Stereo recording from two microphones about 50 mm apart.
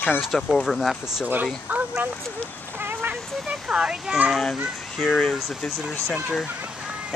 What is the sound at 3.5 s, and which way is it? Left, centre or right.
Speech, centre.